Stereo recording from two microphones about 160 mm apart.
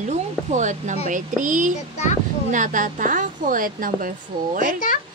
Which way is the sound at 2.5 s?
55° right (ahead or behind).